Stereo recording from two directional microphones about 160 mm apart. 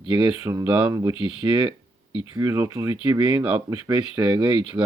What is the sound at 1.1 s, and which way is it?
Speech, 30° left (ahead or behind).